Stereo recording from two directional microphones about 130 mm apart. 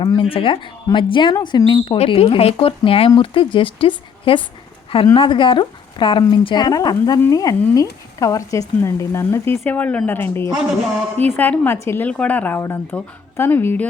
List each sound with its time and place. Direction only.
0.0 s a woman's voice: 35° left (ahead or behind); by 13.8 s 15° left (ahead or behind)